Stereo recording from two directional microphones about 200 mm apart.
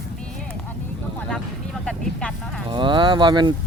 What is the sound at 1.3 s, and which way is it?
Vehicle, 5° left (ahead or behind).